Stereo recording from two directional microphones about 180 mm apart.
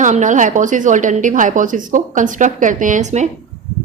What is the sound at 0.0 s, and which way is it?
A woman's voice, 45° right (ahead or behind).